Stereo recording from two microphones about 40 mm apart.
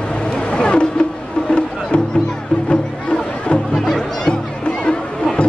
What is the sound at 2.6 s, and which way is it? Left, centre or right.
Music, left.